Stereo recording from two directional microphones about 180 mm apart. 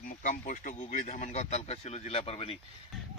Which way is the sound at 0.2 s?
45° left (ahead or behind).